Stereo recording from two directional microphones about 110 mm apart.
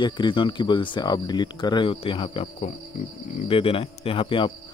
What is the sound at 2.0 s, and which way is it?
Speech, 55° left (ahead or behind).